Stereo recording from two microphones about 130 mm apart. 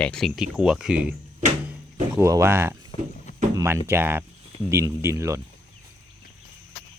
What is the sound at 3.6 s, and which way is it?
Speech, 20° right (ahead or behind).